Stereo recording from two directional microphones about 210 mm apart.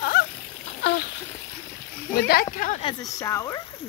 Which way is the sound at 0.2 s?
45° left (ahead or behind).